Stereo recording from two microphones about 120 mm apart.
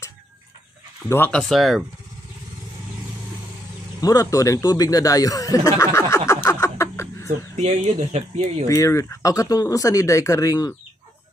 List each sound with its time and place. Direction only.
1.0 s speech: 20° left (ahead or behind)
1.3 s speech: centre (ahead or behind)
4.0 s speech: 30° left (ahead or behind)
7.5 s speech: 65° right (ahead or behind)
8.6 s speech: 25° left (ahead or behind)